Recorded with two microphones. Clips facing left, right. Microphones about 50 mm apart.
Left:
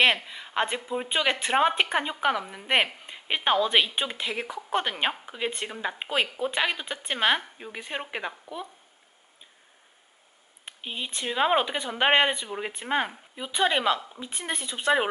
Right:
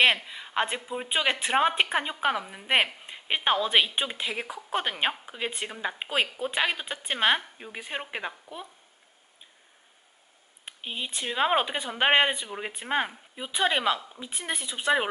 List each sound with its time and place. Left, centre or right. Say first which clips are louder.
0.0 s a woman's voice: even; centre
10.6 s a woman's voice: even; centre